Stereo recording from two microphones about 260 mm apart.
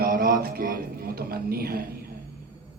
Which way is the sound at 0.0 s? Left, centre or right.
Right.